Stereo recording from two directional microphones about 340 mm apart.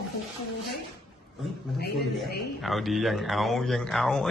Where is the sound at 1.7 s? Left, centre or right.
Left.